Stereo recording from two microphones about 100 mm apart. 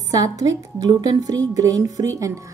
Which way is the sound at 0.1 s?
40° right (ahead or behind).